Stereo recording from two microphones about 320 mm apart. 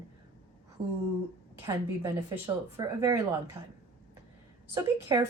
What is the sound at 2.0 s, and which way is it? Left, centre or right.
A woman's voice, centre.